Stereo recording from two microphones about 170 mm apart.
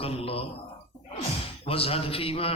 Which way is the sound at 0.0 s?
35° left (ahead or behind).